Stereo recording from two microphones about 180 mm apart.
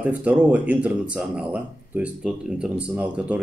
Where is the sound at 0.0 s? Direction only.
10° right (ahead or behind).